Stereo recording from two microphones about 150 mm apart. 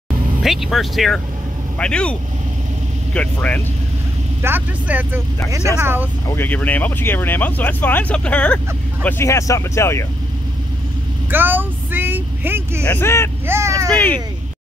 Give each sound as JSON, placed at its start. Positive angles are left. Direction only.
{"t": 0.4, "sound": "speech", "side_deg": 0}
{"t": 4.4, "sound": "speech", "side_deg": -15}
{"t": 6.2, "sound": "speech", "side_deg": 15}
{"t": 11.2, "sound": "vehicle", "side_deg": -15}
{"t": 12.8, "sound": "speech", "side_deg": 15}
{"t": 13.5, "sound": "speech", "side_deg": -20}
{"t": 13.8, "sound": "speech", "side_deg": 10}